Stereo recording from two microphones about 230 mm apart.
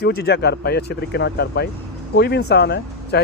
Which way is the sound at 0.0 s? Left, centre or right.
Left.